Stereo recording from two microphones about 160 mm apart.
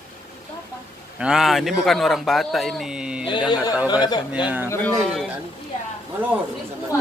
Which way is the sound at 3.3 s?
30° left (ahead or behind).